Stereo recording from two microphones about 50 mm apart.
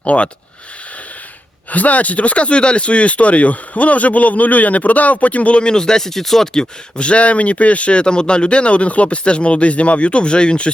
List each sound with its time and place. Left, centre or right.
0.0 s speech: left
1.7 s speech: left